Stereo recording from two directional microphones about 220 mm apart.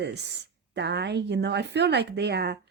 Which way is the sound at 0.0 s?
50° right (ahead or behind).